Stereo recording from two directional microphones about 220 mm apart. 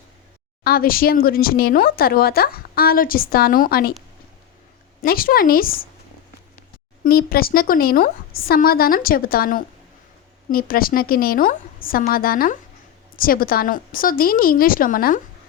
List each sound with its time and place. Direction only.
0.6 s speech: 40° left (ahead or behind)
5.0 s a woman's voice: 40° left (ahead or behind)
7.0 s a woman's voice: 45° left (ahead or behind)